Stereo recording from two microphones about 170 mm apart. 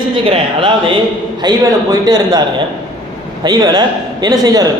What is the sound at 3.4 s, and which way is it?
A man's voice, 25° right (ahead or behind).